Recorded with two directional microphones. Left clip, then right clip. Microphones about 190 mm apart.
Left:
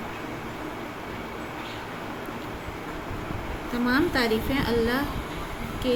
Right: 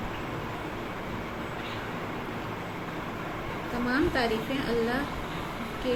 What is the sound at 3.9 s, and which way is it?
A woman's voice, 45° left (ahead or behind).